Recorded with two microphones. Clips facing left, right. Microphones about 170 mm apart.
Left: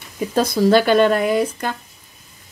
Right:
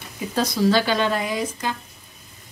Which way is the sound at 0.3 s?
50° left (ahead or behind).